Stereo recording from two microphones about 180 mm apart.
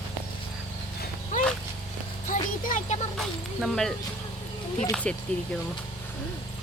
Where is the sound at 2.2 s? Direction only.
45° left (ahead or behind).